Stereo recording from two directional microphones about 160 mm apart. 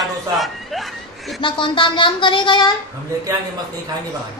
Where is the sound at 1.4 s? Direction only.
30° left (ahead or behind).